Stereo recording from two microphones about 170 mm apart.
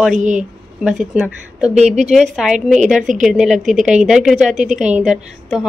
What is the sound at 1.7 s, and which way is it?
Speech, 40° right (ahead or behind).